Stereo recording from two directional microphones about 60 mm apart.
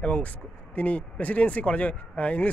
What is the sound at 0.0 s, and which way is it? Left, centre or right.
Speech, left.